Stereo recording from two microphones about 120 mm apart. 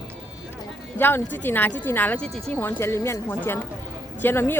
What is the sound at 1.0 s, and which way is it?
Speech, 20° left (ahead or behind).